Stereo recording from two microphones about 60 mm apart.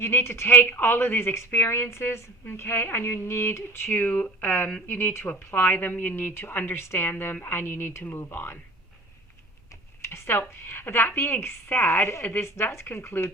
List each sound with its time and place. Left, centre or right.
0.0 s a woman's voice: left
3.9 s a woman's voice: left
10.0 s a woman's voice: left